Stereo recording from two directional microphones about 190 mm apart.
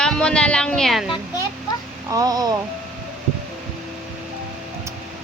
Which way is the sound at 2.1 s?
20° right (ahead or behind).